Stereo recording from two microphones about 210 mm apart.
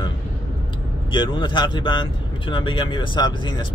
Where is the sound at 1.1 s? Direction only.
20° left (ahead or behind).